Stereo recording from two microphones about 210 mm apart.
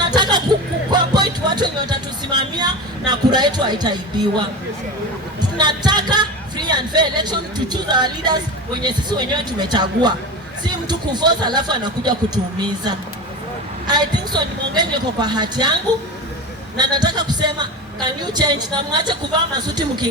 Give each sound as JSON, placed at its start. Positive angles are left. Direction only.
{"t": 0.1, "sound": "a sound", "side_deg": -20}
{"t": 0.9, "sound": "music", "side_deg": -20}
{"t": 5.5, "sound": "speech", "side_deg": -20}
{"t": 16.7, "sound": "speech", "side_deg": -20}
{"t": 19.6, "sound": "speech", "side_deg": -20}